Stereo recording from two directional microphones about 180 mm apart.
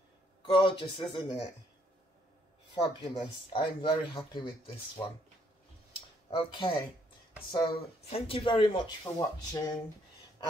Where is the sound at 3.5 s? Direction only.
25° left (ahead or behind).